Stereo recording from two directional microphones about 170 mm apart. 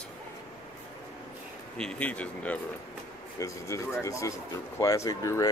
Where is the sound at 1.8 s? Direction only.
5° left (ahead or behind).